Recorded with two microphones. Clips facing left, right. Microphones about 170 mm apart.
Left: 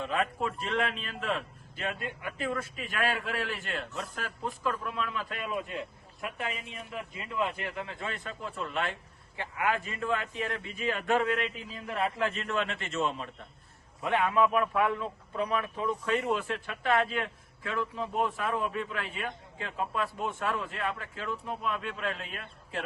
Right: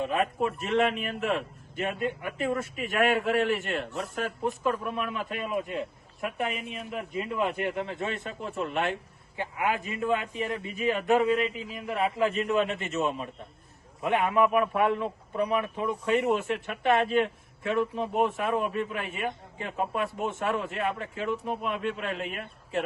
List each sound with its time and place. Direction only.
0.0 s a man's voice: 20° right (ahead or behind)
7.4 s a man's voice: 25° right (ahead or behind); by 12.5 s 5° right (ahead or behind)
12.5 s a man's voice: 15° right (ahead or behind)
21.4 s speech: 60° right (ahead or behind)
21.7 s a man's voice: 25° right (ahead or behind)